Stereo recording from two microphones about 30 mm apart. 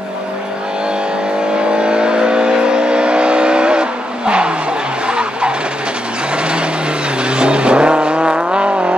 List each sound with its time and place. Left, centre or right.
1.7 s vehicle: right
5.0 s vehicle: right
7.2 s vehicle: right